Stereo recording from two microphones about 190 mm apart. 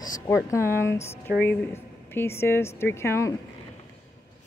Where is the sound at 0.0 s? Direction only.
20° left (ahead or behind).